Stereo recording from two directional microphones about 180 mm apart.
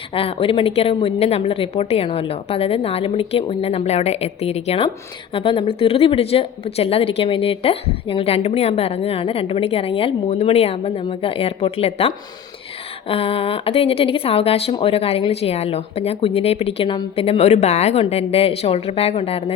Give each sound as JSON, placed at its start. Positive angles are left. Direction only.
{"t": 0.1, "sound": "speech", "side_deg": 30}